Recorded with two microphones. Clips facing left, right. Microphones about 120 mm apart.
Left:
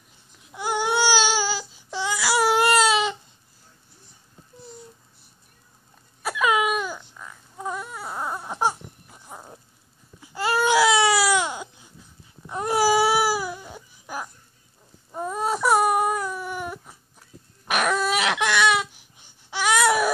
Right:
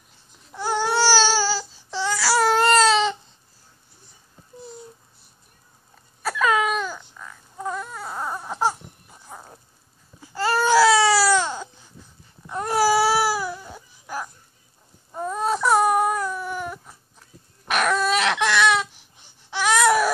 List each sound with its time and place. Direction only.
0.6 s baby cry: 15° left (ahead or behind)
6.2 s baby cry: 10° left (ahead or behind)
10.3 s baby cry: 15° left (ahead or behind)